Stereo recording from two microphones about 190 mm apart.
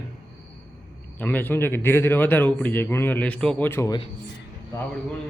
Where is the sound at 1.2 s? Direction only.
10° left (ahead or behind).